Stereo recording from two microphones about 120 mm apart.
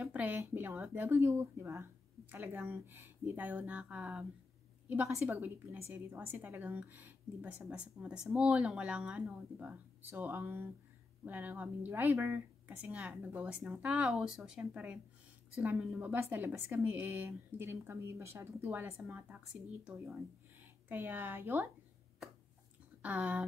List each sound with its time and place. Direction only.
0.0 s a woman's voice: 15° right (ahead or behind)
20.9 s a woman's voice: 15° right (ahead or behind)
23.0 s a woman's voice: 10° right (ahead or behind)